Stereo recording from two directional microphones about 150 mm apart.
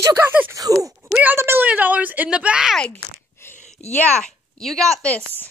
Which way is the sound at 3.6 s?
50° left (ahead or behind).